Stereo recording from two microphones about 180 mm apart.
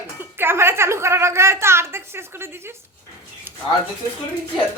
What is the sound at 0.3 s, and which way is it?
A woman's voice, 15° right (ahead or behind).